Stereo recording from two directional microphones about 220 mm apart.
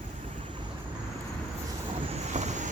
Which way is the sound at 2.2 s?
30° right (ahead or behind).